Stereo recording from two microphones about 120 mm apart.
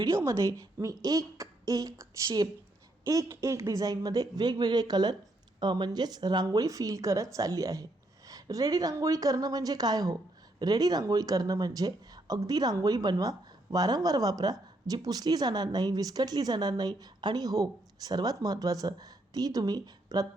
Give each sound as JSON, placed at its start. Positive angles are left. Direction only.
{"t": 0.0, "sound": "a woman's voice", "side_deg": -25}